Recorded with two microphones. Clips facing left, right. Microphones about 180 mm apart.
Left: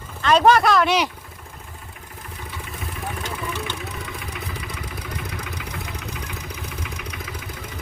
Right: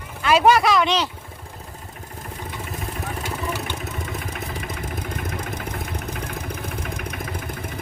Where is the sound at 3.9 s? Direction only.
45° right (ahead or behind).